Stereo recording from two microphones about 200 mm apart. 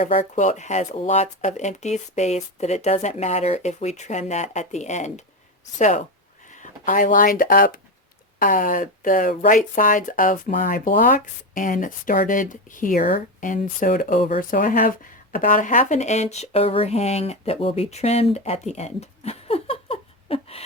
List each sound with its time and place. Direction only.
0.0 s speech: 35° left (ahead or behind)
6.5 s speech: 40° left (ahead or behind)